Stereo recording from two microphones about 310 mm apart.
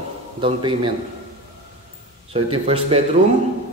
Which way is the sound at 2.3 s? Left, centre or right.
Centre.